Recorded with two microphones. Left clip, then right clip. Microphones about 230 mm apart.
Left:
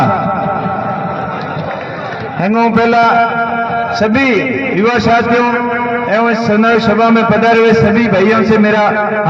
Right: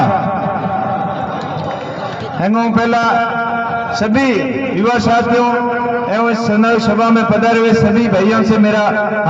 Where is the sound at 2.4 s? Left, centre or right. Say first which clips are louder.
Left 4 dB; left.